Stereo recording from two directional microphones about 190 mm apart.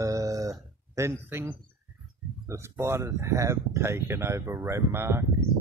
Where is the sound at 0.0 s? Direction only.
15° right (ahead or behind).